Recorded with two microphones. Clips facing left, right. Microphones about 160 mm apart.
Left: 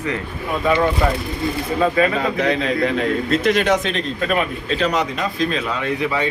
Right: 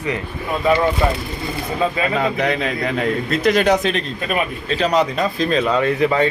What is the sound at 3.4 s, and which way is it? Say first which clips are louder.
Speech: right 4 dB; 40° right (ahead or behind).